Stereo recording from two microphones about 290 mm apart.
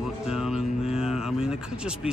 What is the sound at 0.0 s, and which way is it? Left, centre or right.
Music, centre.